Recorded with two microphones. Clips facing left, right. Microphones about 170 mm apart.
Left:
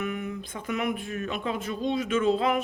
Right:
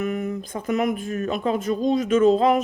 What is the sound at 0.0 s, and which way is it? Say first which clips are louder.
Speech: right 6 dB; 40° right (ahead or behind).